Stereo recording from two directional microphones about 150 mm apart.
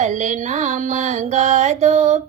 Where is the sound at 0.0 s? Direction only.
55° right (ahead or behind).